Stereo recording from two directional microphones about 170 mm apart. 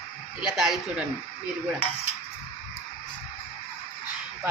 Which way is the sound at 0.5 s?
Centre (ahead or behind).